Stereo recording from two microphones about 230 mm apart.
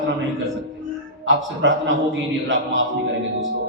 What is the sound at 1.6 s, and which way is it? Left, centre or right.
Speech, right.